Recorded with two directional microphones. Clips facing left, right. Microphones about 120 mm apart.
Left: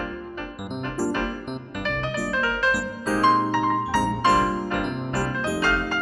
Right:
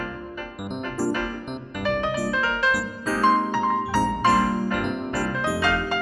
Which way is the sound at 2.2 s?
Centre (ahead or behind).